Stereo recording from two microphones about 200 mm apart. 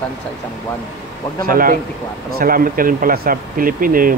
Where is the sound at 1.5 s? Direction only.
45° right (ahead or behind).